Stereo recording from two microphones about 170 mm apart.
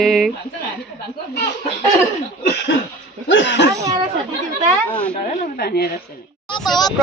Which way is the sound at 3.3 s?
90° left.